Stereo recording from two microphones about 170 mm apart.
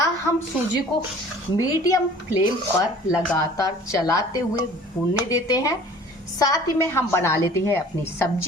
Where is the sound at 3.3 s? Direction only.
20° left (ahead or behind).